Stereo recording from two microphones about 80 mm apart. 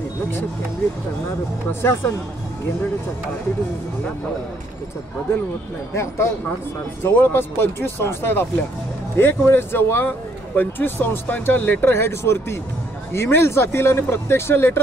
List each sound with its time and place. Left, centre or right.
1.7 s speech: left
5.9 s speech: left